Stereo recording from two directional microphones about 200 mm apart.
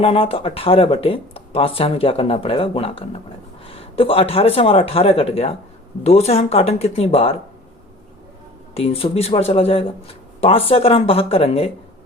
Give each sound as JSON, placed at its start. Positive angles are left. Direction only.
{"t": 0.0, "sound": "speech", "side_deg": 30}
{"t": 8.7, "sound": "speech", "side_deg": 30}